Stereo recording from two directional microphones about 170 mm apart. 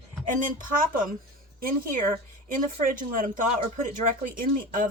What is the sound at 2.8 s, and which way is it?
Speech, 55° right (ahead or behind).